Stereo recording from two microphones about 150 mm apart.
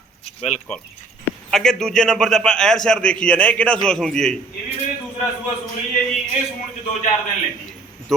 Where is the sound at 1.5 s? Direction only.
5° left (ahead or behind).